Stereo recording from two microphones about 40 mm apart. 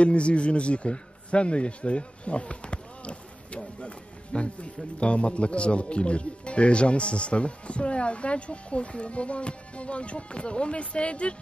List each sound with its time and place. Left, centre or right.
0.0 s a man's voice: left